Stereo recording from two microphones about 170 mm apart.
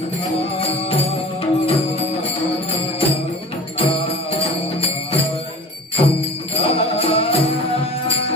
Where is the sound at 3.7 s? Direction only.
35° left (ahead or behind).